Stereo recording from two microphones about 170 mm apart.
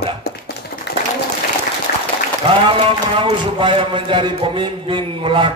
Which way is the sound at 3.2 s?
30° right (ahead or behind).